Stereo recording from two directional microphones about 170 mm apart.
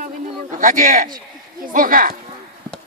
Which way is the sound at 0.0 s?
50° right (ahead or behind).